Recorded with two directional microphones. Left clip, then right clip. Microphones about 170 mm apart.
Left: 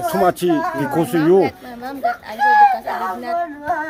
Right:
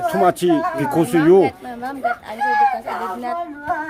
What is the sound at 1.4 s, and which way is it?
Speech, 25° right (ahead or behind).